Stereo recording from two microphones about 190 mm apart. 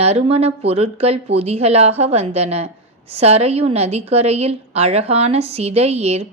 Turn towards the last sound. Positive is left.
turn(degrees=-35)  # may be behind; listen again after turning